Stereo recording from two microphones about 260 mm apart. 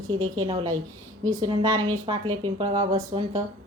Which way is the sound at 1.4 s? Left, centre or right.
Centre.